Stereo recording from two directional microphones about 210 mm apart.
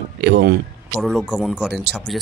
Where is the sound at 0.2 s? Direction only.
55° right (ahead or behind).